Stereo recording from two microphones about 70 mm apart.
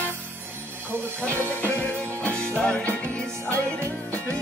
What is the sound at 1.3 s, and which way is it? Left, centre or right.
Music, right.